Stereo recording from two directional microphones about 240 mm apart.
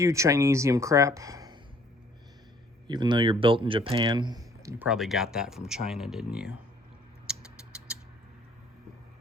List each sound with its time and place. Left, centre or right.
0.0 s speech: centre
2.8 s speech: centre
4.9 s speech: centre
7.3 s creak: centre